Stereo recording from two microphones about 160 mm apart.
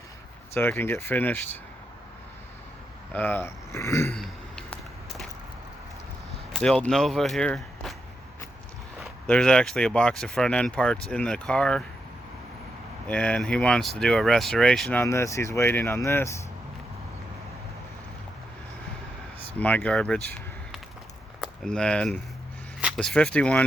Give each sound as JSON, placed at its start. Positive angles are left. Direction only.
{"t": 0.5, "sound": "speech", "side_deg": 15}
{"t": 3.1, "sound": "speech", "side_deg": 10}
{"t": 4.1, "sound": "a sound", "side_deg": 5}
{"t": 6.5, "sound": "speech", "side_deg": 5}
{"t": 9.0, "sound": "speech", "side_deg": 5}
{"t": 13.1, "sound": "speech", "side_deg": 10}
{"t": 19.5, "sound": "speech", "side_deg": 10}
{"t": 21.4, "sound": "speech", "side_deg": 5}